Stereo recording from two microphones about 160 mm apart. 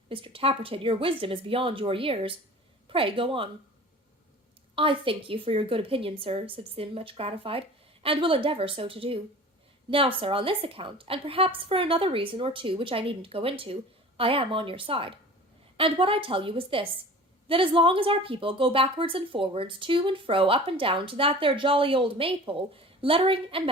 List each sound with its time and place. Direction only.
0.1 s a woman's voice: 35° right (ahead or behind)
4.7 s a woman's voice: 35° right (ahead or behind)